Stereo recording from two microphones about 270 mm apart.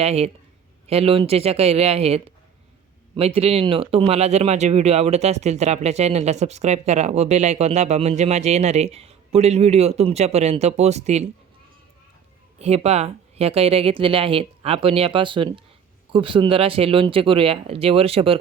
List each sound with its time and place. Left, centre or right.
0.0 s speech: right
12.5 s speech: right